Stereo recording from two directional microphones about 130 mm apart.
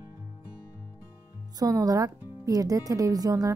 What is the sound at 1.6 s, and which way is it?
Speech, 25° right (ahead or behind).